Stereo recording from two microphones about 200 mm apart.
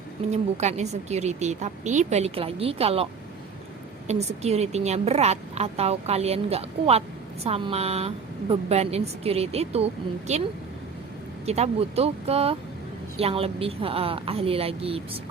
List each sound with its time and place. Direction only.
0.3 s a woman's voice: 35° right (ahead or behind)
11.4 s a woman's voice: 30° right (ahead or behind)